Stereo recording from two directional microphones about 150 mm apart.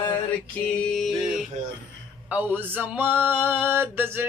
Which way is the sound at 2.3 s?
10° right (ahead or behind).